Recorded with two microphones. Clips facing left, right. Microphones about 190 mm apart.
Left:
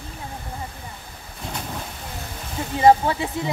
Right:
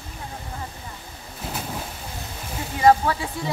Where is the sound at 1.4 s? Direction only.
5° right (ahead or behind).